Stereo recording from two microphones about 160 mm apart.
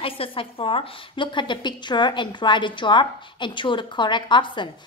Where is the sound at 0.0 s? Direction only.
35° left (ahead or behind).